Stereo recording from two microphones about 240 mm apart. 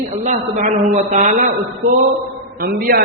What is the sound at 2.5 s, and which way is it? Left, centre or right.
Speech, right.